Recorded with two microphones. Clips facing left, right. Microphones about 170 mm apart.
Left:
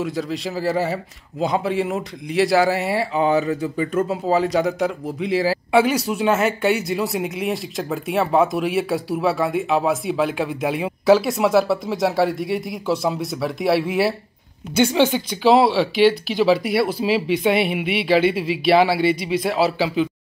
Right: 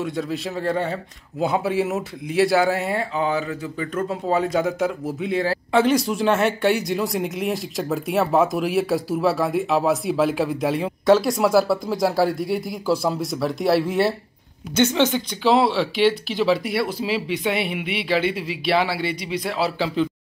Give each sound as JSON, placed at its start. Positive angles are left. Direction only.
{"t": 0.0, "sound": "speech", "side_deg": 0}
{"t": 3.2, "sound": "speech", "side_deg": 20}
{"t": 4.1, "sound": "speech", "side_deg": 0}